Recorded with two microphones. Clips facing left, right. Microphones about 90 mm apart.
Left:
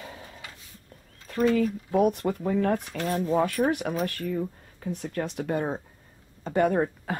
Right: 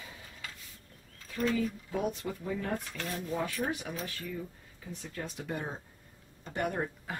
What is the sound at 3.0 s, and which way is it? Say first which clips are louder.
Speech: left 10 dB; 35° left (ahead or behind).